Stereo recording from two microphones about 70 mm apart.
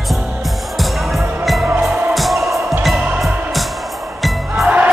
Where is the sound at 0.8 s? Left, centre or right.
Centre.